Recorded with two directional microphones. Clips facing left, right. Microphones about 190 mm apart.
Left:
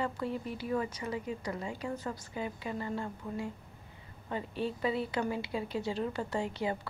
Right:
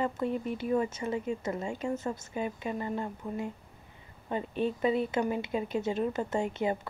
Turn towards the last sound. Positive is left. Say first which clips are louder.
# right 4 dB
turn(degrees=-20)  # may be behind; listen again after turning